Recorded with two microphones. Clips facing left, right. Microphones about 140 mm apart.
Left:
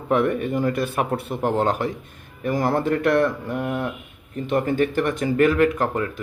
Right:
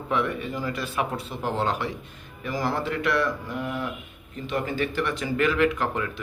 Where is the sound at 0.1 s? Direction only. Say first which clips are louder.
Left 7 dB; 50° left (ahead or behind).